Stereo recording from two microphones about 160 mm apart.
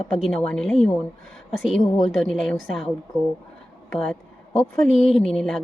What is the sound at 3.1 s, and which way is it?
Speech, 20° right (ahead or behind).